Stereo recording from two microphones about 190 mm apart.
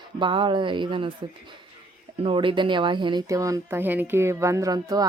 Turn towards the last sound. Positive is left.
turn(degrees=-20)  # may be behind; listen again after turning